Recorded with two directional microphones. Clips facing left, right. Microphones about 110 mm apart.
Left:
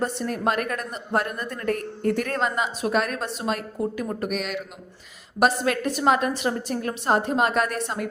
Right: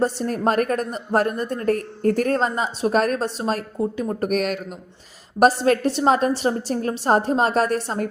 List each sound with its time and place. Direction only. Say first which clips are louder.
0.0 s a woman's voice: right 4 dB; 35° right (ahead or behind)
4.2 s a man's voice: right 6 dB; 45° right (ahead or behind)